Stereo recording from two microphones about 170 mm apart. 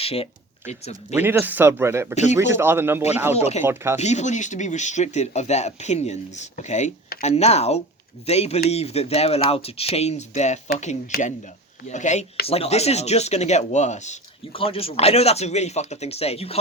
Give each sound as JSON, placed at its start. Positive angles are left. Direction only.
{"t": 0.0, "sound": "speech", "side_deg": 35}
{"t": 1.1, "sound": "a man's voice", "side_deg": -10}
{"t": 3.3, "sound": "speech", "side_deg": 40}
{"t": 3.6, "sound": "a man's voice", "side_deg": -15}
{"t": 4.0, "sound": "speech", "side_deg": 40}
{"t": 11.9, "sound": "speech", "side_deg": 45}